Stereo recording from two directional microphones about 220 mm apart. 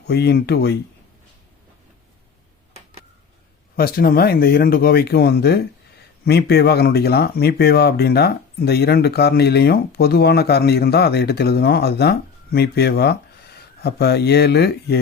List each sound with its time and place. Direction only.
0.1 s speech: 50° left (ahead or behind)
3.8 s speech: 45° left (ahead or behind)